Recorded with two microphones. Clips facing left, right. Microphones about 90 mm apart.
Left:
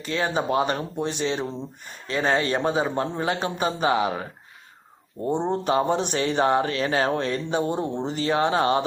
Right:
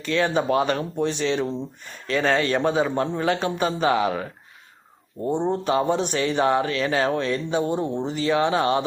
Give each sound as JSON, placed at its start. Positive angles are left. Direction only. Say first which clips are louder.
{"t": 0.1, "sound": "a man's voice", "louder": "right 2 dB", "side_deg": 25}
{"t": 5.3, "sound": "a man's voice", "louder": "right 1 dB", "side_deg": 25}